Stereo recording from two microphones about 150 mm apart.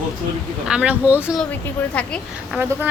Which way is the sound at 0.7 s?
5° right (ahead or behind).